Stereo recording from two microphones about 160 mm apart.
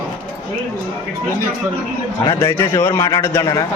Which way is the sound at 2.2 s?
20° left (ahead or behind).